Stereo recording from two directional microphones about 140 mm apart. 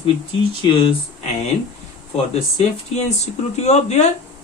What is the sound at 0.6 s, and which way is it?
Speech, 35° left (ahead or behind).